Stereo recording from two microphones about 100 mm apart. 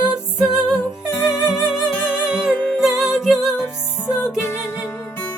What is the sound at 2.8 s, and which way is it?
Music, 5° right (ahead or behind).